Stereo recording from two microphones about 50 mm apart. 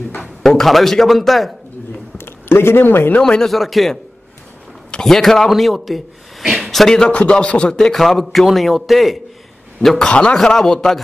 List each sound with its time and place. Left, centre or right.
0.2 s speech: centre
2.1 s speech: left
3.2 s a man's voice: centre
3.4 s speech: centre
5.0 s speech: centre
6.9 s a man's voice: centre
7.9 s speech: centre
9.9 s speech: centre
10.3 s a man's voice: centre